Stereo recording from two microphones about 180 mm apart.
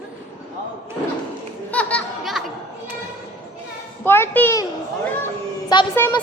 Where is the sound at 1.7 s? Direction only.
5° left (ahead or behind).